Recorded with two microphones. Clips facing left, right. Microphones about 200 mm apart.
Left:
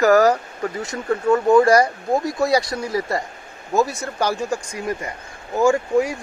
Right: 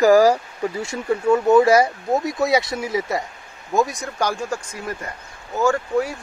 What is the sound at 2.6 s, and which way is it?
Speech, 25° right (ahead or behind).